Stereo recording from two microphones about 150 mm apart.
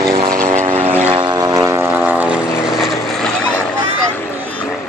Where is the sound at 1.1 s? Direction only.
25° right (ahead or behind).